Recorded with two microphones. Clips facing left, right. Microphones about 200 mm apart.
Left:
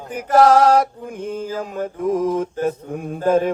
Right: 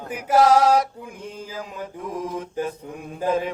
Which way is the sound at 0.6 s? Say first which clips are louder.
Left 4 dB; 50° left (ahead or behind).